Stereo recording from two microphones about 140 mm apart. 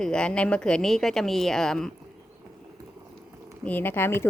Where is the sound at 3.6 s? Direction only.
15° left (ahead or behind).